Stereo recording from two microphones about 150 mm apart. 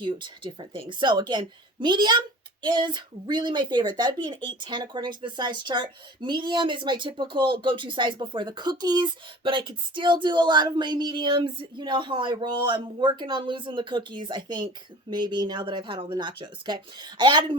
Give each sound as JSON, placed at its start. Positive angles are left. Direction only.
{"t": 0.0, "sound": "a woman's voice", "side_deg": -35}